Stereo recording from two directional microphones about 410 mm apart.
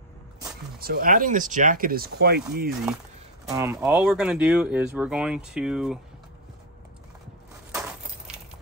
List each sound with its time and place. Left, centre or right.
0.7 s speech: right
3.4 s speech: centre